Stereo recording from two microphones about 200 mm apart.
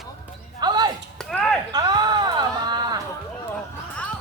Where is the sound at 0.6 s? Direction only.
20° right (ahead or behind).